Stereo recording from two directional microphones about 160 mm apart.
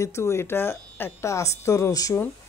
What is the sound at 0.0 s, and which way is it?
Speech, 15° left (ahead or behind).